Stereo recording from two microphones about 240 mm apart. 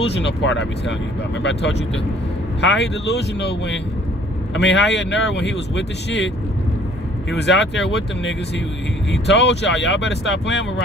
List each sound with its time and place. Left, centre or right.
0.0 s speech: left